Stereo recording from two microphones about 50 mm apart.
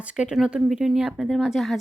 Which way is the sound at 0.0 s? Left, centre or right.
Right.